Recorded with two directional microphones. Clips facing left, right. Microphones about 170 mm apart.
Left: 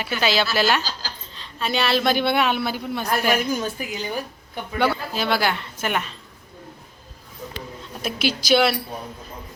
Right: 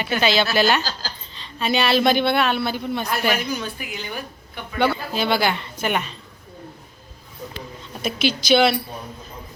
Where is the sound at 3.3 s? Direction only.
45° left (ahead or behind).